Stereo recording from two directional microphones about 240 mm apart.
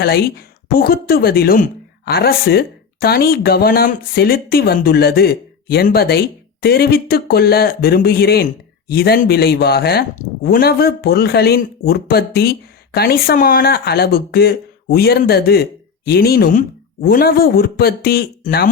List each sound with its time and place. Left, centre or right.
0.0 s speech: left